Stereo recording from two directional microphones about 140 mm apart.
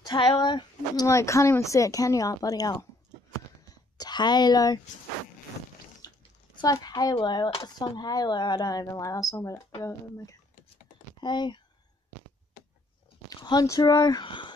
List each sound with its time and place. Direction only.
0.0 s speech: 35° left (ahead or behind)
1.0 s speech: 20° left (ahead or behind)
3.7 s a sound: 30° left (ahead or behind)
6.0 s a sound: 25° left (ahead or behind)
6.6 s speech: 30° left (ahead or behind)
13.3 s speech: 30° left (ahead or behind)